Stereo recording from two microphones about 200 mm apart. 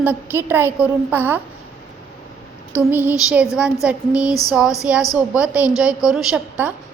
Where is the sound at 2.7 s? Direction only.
10° right (ahead or behind).